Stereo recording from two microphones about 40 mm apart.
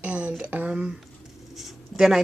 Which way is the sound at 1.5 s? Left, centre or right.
Centre.